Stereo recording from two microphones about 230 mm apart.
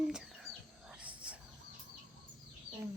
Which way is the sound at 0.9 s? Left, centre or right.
Centre.